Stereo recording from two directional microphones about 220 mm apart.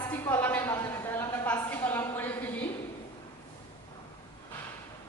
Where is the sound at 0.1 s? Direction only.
10° left (ahead or behind).